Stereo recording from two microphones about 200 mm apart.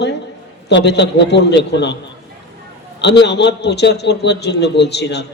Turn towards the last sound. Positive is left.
turn(degrees=55)  # may be behind; listen again after turning